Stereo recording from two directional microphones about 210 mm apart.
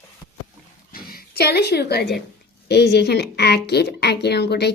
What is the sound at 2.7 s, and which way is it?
A woman's voice, 50° left (ahead or behind).